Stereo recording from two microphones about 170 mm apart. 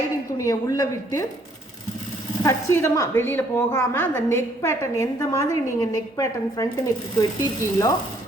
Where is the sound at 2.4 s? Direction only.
20° left (ahead or behind).